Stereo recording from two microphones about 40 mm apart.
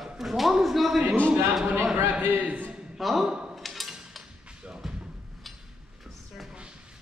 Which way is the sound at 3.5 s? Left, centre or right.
Centre.